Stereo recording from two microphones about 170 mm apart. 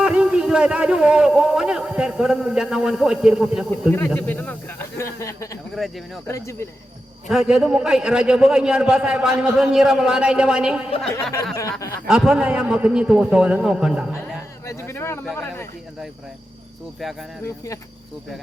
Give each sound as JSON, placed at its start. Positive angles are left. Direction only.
{"t": 0.0, "sound": "a man's voice", "side_deg": -5}
{"t": 3.7, "sound": "speech", "side_deg": 10}
{"t": 7.3, "sound": "a man's voice", "side_deg": -5}
{"t": 11.1, "sound": "speech", "side_deg": 15}
{"t": 12.0, "sound": "a man's voice", "side_deg": -5}
{"t": 14.6, "sound": "speech", "side_deg": 15}
{"t": 17.0, "sound": "a man's voice", "side_deg": 0}
{"t": 17.4, "sound": "speech", "side_deg": 20}